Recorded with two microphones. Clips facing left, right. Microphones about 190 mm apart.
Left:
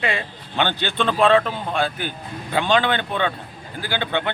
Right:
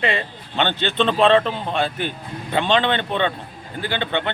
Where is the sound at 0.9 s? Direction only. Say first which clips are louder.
Right 2 dB; 25° right (ahead or behind).